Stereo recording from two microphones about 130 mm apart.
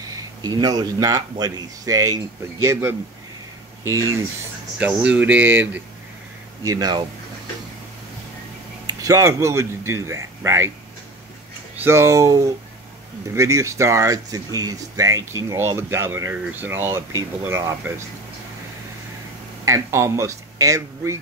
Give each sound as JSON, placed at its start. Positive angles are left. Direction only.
{"t": 0.4, "sound": "speech", "side_deg": -30}
{"t": 4.7, "sound": "speech", "side_deg": -10}
{"t": 6.6, "sound": "speech", "side_deg": -30}
{"t": 8.8, "sound": "speech", "side_deg": -25}
{"t": 11.7, "sound": "speech", "side_deg": -20}
{"t": 19.6, "sound": "speech", "side_deg": -25}